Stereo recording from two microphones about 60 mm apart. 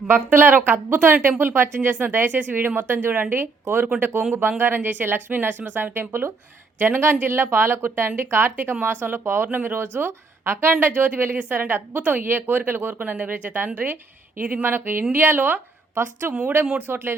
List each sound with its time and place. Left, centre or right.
0.1 s a woman's voice: right